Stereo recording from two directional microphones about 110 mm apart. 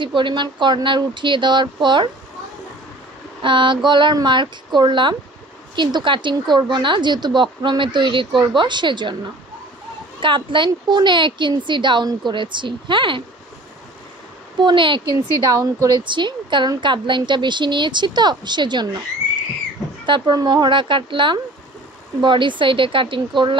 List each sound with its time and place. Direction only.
0.0 s a woman's voice: 45° right (ahead or behind)
3.4 s a woman's voice: 45° right (ahead or behind)
10.2 s a woman's voice: 50° right (ahead or behind)
14.6 s a woman's voice: 45° right (ahead or behind)
15.5 s speech: 30° right (ahead or behind)
16.0 s a woman's voice: 45° right (ahead or behind)
20.1 s a woman's voice: 40° right (ahead or behind)